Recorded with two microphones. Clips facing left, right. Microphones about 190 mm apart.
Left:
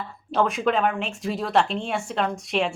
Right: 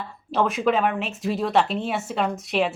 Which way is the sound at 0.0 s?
Centre (ahead or behind).